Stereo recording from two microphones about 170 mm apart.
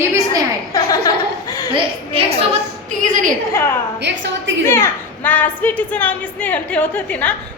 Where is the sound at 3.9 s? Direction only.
90° right.